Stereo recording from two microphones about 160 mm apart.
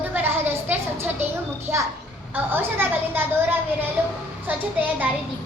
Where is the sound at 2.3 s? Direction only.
10° right (ahead or behind).